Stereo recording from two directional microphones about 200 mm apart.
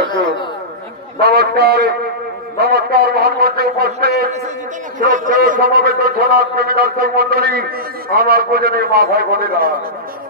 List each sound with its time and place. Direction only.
1.2 s a man's voice: 55° right (ahead or behind)
4.9 s a man's voice: 40° right (ahead or behind)